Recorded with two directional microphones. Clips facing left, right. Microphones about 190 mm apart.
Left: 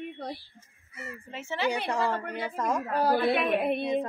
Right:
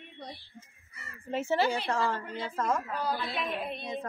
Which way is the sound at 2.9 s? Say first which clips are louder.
Left 9 dB; 65° left (ahead or behind).